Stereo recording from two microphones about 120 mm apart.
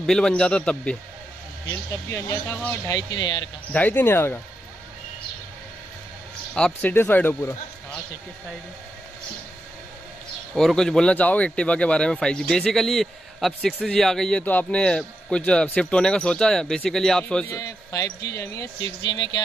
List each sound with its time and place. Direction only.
0.0 s a man's voice: 5° left (ahead or behind)
1.7 s speech: 20° left (ahead or behind)
2.9 s speech: 30° left (ahead or behind)
3.7 s a man's voice: 15° left (ahead or behind)
6.5 s a man's voice: 10° left (ahead or behind)
10.5 s a man's voice: 5° left (ahead or behind)
17.6 s speech: 30° left (ahead or behind)
19.0 s speech: 35° left (ahead or behind)